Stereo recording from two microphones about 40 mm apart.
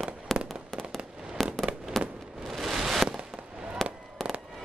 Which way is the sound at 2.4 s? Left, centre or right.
Centre.